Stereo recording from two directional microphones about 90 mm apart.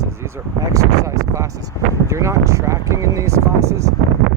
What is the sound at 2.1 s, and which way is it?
Speech, 35° right (ahead or behind).